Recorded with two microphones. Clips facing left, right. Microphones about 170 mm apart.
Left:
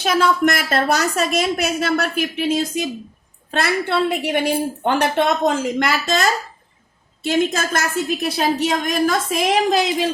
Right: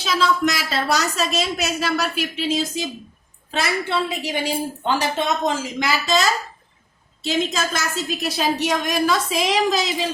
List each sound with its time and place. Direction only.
0.0 s a woman's voice: 55° left (ahead or behind)